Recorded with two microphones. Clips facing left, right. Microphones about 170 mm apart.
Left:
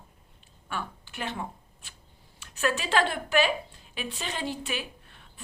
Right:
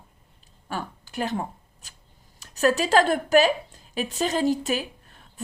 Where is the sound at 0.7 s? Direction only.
40° right (ahead or behind).